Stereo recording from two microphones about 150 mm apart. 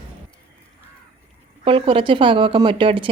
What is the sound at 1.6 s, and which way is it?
Speech, 35° right (ahead or behind).